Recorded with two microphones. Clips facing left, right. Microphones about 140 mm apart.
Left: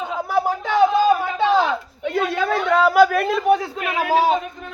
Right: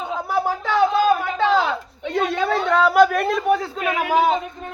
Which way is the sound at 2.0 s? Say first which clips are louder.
Even; 5° left (ahead or behind).